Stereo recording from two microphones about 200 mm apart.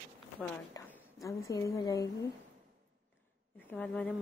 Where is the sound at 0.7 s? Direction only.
15° left (ahead or behind).